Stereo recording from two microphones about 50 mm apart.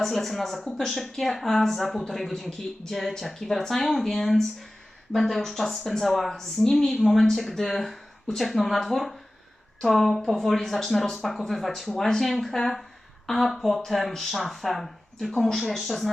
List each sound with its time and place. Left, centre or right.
0.0 s speech: centre